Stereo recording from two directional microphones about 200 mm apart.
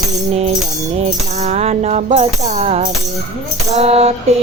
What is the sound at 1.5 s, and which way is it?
Music, 35° right (ahead or behind).